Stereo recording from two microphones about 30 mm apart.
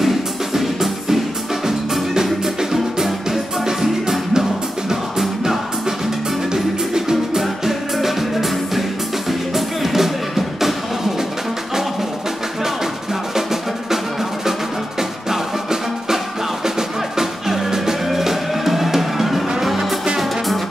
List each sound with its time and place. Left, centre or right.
0.0 s music: centre
7.6 s music: centre
13.3 s music: centre
15.0 s music: centre